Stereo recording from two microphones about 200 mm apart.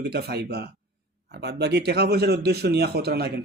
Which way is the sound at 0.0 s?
55° right (ahead or behind).